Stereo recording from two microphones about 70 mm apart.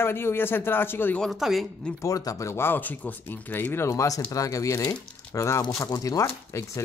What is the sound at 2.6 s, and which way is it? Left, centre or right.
Speech, left.